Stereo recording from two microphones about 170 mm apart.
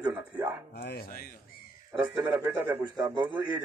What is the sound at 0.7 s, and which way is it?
Chopping, 70° left (ahead or behind).